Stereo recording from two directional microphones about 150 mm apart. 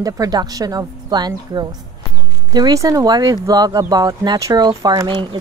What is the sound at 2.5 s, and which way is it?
Speech, 25° right (ahead or behind).